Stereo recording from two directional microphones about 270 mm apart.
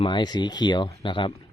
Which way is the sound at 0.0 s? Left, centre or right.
Centre.